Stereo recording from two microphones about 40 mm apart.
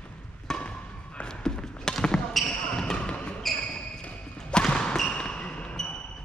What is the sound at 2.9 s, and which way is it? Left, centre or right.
Basketball bounce, left.